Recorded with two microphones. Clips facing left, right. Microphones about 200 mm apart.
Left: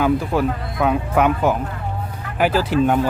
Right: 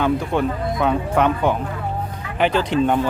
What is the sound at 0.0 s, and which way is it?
A man's voice, 5° left (ahead or behind).